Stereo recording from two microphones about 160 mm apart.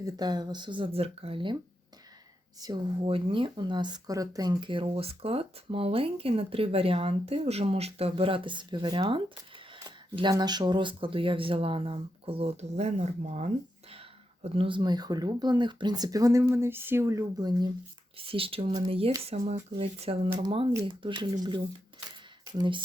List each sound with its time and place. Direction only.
0.0 s speech: 25° right (ahead or behind)
2.6 s speech: 25° right (ahead or behind)
3.0 s speech: 35° right (ahead or behind)
18.2 s speech: 35° right (ahead or behind)